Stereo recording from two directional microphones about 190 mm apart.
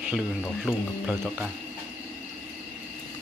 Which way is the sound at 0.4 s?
5° left (ahead or behind).